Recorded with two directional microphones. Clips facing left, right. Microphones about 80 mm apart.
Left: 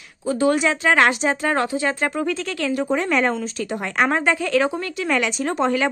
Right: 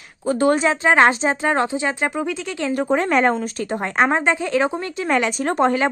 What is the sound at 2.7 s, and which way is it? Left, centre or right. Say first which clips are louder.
A woman's voice: right 3 dB; right.